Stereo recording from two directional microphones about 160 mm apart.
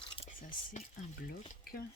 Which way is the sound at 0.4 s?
55° left (ahead or behind).